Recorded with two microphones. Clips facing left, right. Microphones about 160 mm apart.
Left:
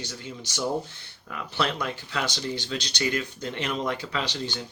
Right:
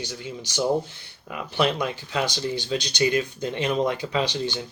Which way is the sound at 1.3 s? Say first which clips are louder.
Right 5 dB; 15° right (ahead or behind).